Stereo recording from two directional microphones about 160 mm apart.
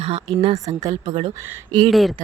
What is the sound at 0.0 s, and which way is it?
Speech, 35° right (ahead or behind).